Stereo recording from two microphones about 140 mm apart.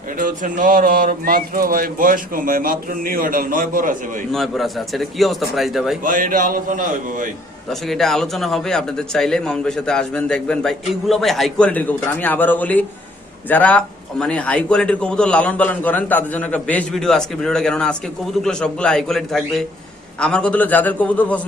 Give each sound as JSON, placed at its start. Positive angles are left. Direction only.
{"t": 0.2, "sound": "speech", "side_deg": -70}
{"t": 4.3, "sound": "a man's voice", "side_deg": 0}
{"t": 6.0, "sound": "a man's voice", "side_deg": -75}
{"t": 7.7, "sound": "a man's voice", "side_deg": 0}